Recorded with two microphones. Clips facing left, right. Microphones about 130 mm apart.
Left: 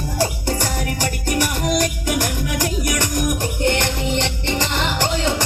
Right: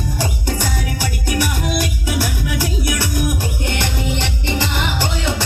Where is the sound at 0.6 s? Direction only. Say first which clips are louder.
Even; 10° right (ahead or behind).